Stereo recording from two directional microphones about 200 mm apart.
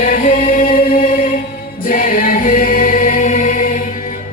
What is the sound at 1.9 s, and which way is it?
Choir, 45° left (ahead or behind).